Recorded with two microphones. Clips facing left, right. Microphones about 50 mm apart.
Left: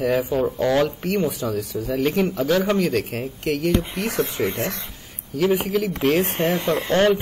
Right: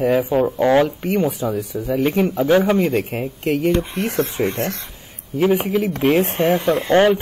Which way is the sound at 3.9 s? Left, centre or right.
Right.